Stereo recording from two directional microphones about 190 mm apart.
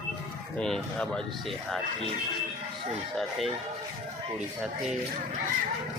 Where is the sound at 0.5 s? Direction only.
5° left (ahead or behind).